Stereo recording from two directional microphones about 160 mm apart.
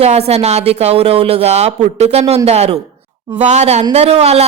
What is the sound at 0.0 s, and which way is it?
A woman's voice, 40° right (ahead or behind).